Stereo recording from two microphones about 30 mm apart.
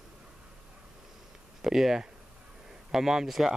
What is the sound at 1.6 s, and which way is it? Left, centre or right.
Speech, centre.